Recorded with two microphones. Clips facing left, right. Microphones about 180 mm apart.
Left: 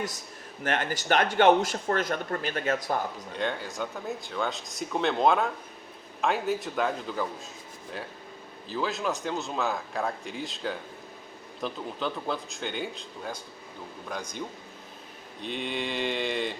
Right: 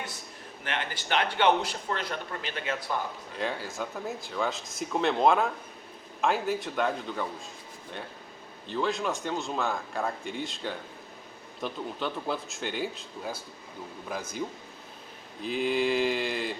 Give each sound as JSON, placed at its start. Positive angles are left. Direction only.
{"t": 0.6, "sound": "speech", "side_deg": 45}
{"t": 3.3, "sound": "speech", "side_deg": 0}
{"t": 8.6, "sound": "speech", "side_deg": 0}